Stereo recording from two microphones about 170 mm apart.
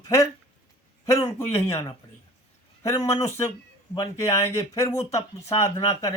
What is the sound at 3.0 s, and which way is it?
Speech, 15° left (ahead or behind).